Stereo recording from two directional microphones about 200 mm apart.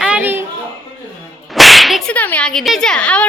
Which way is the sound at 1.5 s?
Centre (ahead or behind).